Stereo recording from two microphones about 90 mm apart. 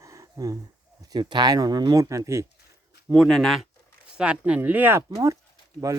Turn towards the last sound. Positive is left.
turn(degrees=-35)  # may be behind; listen again after turning